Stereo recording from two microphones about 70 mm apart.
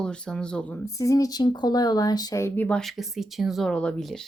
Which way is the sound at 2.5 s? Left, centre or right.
Centre.